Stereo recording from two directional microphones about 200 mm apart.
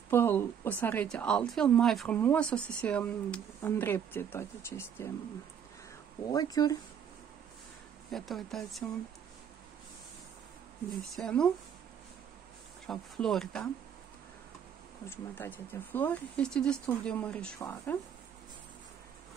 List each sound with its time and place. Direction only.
0.1 s speech: 10° left (ahead or behind)
6.3 s speech: 20° left (ahead or behind)
8.1 s speech: centre (ahead or behind)
11.1 s speech: 5° left (ahead or behind)
12.8 s speech: centre (ahead or behind)
15.0 s speech: 10° left (ahead or behind)